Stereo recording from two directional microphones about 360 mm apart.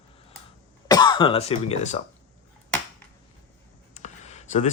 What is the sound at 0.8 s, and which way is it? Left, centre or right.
Speech, centre.